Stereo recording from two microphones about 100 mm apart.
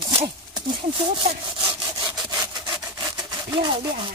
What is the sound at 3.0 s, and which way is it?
Sawing, 45° right (ahead or behind).